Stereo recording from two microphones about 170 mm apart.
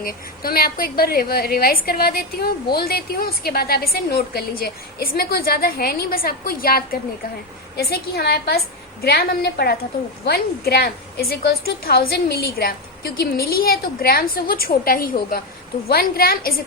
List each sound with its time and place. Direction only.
0.0 s a woman's voice: 60° left (ahead or behind)